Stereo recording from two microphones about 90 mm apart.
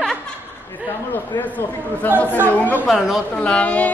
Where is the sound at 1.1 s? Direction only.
20° left (ahead or behind).